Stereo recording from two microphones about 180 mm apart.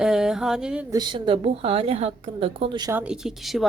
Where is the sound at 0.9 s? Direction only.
25° right (ahead or behind).